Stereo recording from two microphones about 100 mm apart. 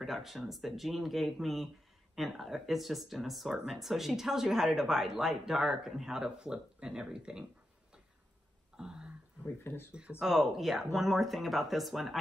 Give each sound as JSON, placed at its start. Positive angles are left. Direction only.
{"t": 0.0, "sound": "speech", "side_deg": 0}
{"t": 8.7, "sound": "a sound", "side_deg": -10}
{"t": 9.6, "sound": "speech", "side_deg": 20}
{"t": 9.9, "sound": "speech", "side_deg": -10}